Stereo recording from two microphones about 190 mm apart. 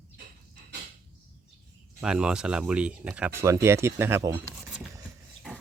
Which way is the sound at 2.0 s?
5° right (ahead or behind).